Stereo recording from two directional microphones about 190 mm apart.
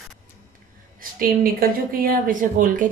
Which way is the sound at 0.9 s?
50° right (ahead or behind).